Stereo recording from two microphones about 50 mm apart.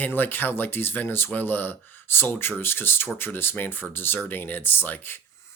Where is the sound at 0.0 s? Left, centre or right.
Left.